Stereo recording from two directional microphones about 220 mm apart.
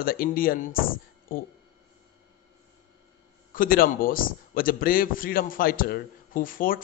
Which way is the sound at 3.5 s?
40° left (ahead or behind).